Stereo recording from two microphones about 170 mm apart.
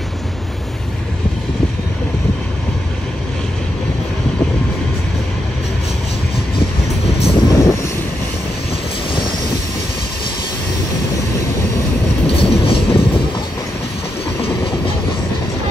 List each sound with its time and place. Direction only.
7.2 s vehicle: 35° left (ahead or behind)
12.4 s train: 35° left (ahead or behind)
14.4 s train: 30° left (ahead or behind)